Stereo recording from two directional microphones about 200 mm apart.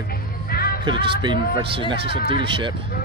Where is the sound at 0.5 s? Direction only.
50° left (ahead or behind).